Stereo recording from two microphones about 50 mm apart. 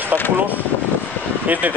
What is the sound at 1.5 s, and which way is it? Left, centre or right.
Speech, right.